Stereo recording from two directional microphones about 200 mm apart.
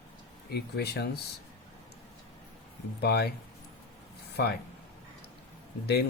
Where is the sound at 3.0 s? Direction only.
55° left (ahead or behind).